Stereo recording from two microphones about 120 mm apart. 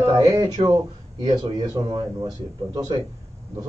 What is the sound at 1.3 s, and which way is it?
A man's voice, 35° right (ahead or behind).